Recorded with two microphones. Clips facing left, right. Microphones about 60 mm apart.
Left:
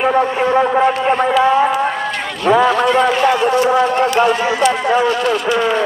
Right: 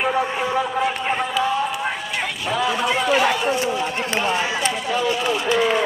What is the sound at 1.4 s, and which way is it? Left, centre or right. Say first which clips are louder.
Speech: left 9 dB; left.